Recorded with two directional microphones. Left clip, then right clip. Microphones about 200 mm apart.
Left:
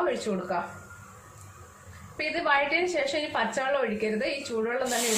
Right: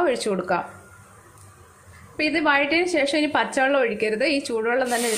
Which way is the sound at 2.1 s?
45° right (ahead or behind).